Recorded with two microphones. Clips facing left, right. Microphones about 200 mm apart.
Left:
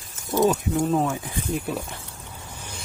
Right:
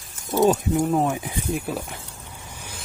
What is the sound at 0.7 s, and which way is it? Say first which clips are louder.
Speech: right 1 dB; 15° right (ahead or behind).